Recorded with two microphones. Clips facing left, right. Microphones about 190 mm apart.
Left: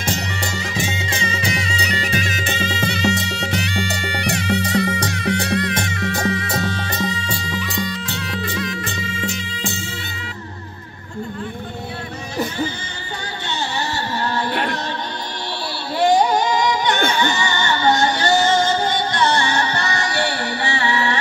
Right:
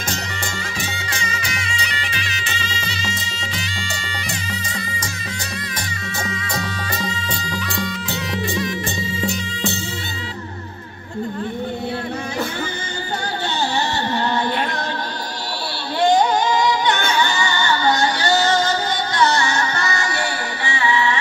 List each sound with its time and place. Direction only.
0.7 s music: 25° left (ahead or behind); by 6.6 s 60° left (ahead or behind)
7.2 s music: centre (ahead or behind)
17.2 s music: 20° left (ahead or behind); by 21.2 s 40° left (ahead or behind)